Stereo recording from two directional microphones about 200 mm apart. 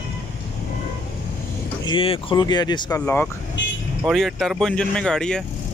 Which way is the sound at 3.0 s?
10° left (ahead or behind).